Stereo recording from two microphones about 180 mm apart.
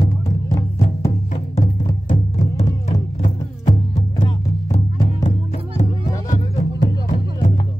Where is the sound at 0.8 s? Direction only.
35° left (ahead or behind).